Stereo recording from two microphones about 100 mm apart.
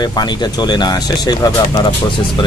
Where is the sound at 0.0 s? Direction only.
45° left (ahead or behind).